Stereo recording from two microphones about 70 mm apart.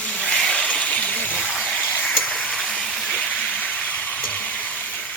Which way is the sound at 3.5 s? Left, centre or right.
Centre.